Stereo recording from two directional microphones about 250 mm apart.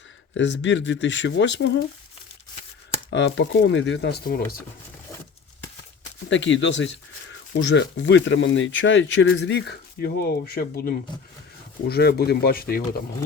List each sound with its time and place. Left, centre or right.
0.3 s speech: left
3.1 s speech: left
6.3 s speech: left